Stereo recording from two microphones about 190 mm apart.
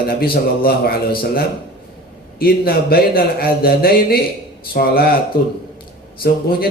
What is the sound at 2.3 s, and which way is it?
A man's voice, 50° left (ahead or behind).